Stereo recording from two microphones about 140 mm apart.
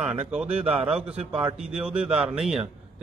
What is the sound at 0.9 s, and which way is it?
Speech, 45° right (ahead or behind).